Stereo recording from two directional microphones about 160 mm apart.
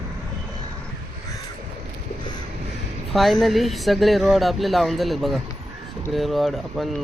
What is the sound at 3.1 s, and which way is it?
Speech, centre (ahead or behind).